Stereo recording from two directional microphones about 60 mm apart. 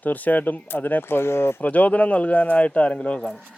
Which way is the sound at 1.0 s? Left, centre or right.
Left.